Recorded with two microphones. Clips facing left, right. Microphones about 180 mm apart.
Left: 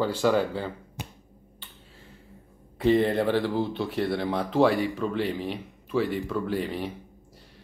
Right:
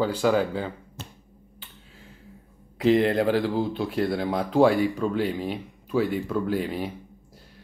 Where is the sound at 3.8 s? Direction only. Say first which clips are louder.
Right 2 dB; 10° right (ahead or behind).